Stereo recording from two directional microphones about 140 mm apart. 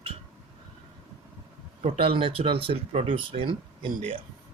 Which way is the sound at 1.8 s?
45° right (ahead or behind).